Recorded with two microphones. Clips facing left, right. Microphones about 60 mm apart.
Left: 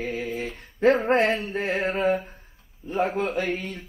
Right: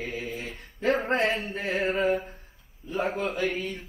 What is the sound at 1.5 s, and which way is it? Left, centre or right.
Speech, left.